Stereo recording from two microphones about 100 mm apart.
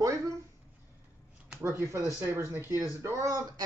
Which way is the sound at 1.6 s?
25° right (ahead or behind).